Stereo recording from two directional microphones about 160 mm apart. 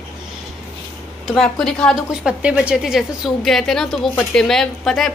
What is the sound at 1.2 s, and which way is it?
A woman's voice, 5° left (ahead or behind).